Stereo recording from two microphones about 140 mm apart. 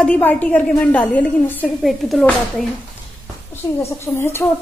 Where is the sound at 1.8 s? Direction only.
Centre (ahead or behind).